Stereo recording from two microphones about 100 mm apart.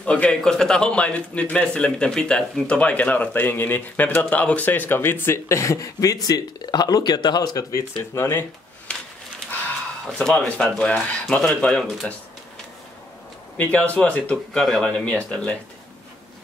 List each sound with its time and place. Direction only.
0.0 s a man's voice: 10° left (ahead or behind); by 7.8 s 40° left (ahead or behind)
8.1 s speech: 25° left (ahead or behind)
8.9 s a sound: 10° left (ahead or behind)
10.1 s a man's voice: 10° left (ahead or behind)
13.6 s a man's voice: 15° left (ahead or behind)